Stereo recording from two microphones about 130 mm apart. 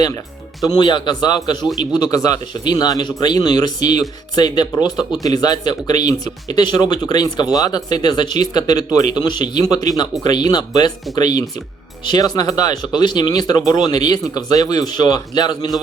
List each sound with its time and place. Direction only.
0.8 s speech: 35° left (ahead or behind)